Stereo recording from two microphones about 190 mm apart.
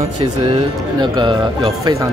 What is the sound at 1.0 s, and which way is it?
Speech, 25° right (ahead or behind).